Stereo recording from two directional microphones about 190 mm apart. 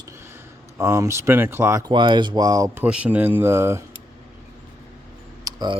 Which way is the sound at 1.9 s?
25° right (ahead or behind).